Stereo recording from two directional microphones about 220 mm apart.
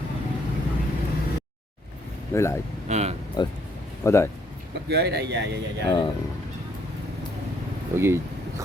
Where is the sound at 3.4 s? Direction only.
20° left (ahead or behind).